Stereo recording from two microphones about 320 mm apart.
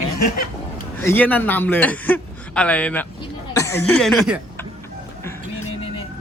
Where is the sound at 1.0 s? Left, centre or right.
Centre.